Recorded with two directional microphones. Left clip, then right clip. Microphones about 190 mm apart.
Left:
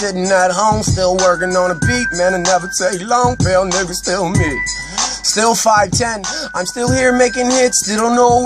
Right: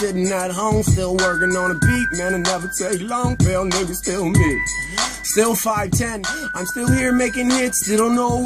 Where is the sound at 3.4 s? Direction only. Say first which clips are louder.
Left 7 dB; 40° left (ahead or behind).